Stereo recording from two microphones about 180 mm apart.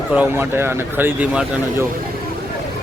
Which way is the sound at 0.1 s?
10° right (ahead or behind).